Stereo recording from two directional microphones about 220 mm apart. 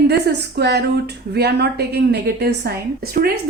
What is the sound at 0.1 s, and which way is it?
A woman's voice, 50° right (ahead or behind).